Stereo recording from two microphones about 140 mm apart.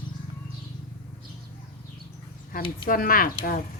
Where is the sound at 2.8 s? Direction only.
90° left.